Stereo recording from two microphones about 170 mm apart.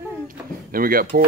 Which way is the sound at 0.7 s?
60° right (ahead or behind).